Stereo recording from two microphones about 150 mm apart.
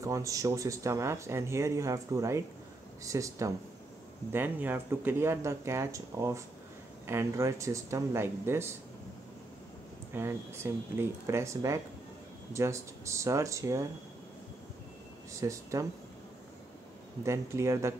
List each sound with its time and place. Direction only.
0.0 s speech: 20° right (ahead or behind)
10.1 s speech: 15° right (ahead or behind)
15.4 s speech: 20° right (ahead or behind)
17.2 s speech: 20° right (ahead or behind)